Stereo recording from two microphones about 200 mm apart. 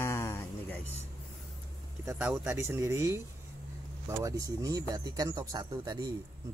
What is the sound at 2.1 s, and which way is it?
Speech, 10° right (ahead or behind).